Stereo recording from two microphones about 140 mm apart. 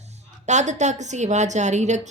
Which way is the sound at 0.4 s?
55° right (ahead or behind).